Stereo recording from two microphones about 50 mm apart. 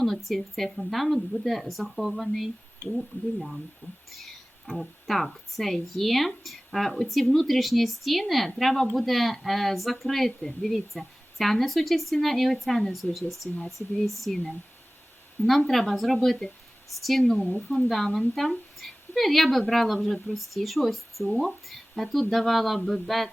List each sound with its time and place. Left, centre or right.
0.0 s speech: centre
3.1 s speech: left
4.1 s speech: centre
15.4 s speech: centre